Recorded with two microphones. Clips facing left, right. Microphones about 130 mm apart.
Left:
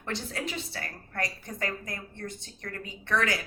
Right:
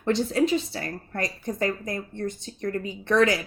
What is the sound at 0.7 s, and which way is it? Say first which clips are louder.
A woman's voice: right 7 dB; 25° right (ahead or behind).